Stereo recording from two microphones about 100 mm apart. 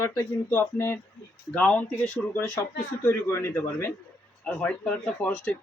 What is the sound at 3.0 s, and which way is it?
Speech, 25° left (ahead or behind).